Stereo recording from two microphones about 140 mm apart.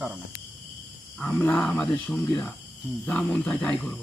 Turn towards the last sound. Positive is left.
turn(degrees=5)  # may be behind; listen again after turning